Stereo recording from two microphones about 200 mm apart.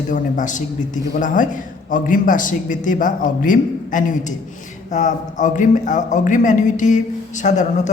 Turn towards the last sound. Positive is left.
turn(degrees=35)  # may be behind; listen again after turning